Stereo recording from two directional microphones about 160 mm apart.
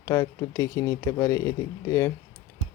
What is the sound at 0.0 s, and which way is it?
Speech, 20° left (ahead or behind).